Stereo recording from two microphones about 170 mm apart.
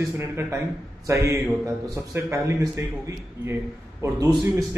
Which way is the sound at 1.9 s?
15° right (ahead or behind).